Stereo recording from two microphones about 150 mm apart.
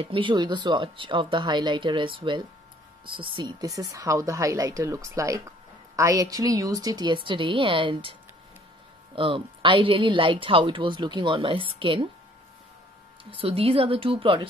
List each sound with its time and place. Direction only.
0.0 s speech: 35° right (ahead or behind)
13.2 s speech: 40° right (ahead or behind)